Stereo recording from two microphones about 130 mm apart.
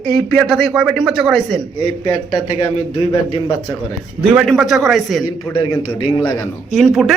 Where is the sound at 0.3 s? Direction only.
Centre (ahead or behind).